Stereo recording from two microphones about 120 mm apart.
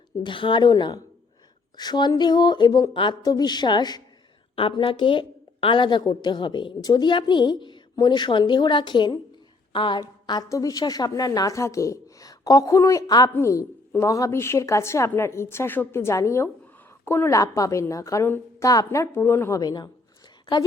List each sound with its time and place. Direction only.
0.3 s a woman's voice: 45° left (ahead or behind)
4.5 s a woman's voice: 50° left (ahead or behind); by 19.9 s 35° left (ahead or behind)